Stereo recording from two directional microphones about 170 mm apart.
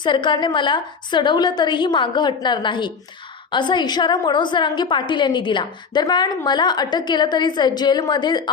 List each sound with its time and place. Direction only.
0.0 s a woman's voice: 30° left (ahead or behind)